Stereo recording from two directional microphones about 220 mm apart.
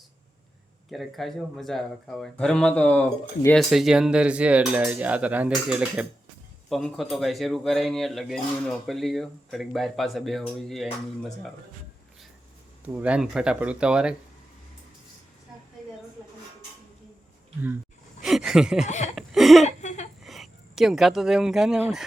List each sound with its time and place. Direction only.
0.9 s speech: centre (ahead or behind)
12.8 s speech: 5° right (ahead or behind)
18.2 s a sound: centre (ahead or behind)
18.9 s speech: 30° left (ahead or behind)
19.1 s a sound: centre (ahead or behind)
19.6 s laughter: 30° left (ahead or behind)
20.2 s speech: centre (ahead or behind)